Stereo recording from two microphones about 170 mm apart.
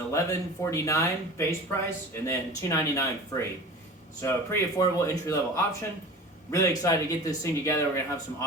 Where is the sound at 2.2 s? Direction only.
20° left (ahead or behind).